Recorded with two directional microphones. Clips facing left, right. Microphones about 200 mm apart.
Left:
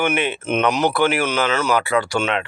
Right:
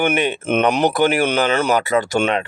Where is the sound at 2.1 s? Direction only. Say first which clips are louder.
Right 3 dB; 45° right (ahead or behind).